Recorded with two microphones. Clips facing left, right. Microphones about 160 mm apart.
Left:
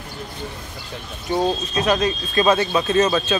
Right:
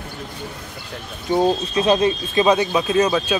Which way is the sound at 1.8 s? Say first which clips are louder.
Right 3 dB; 25° right (ahead or behind).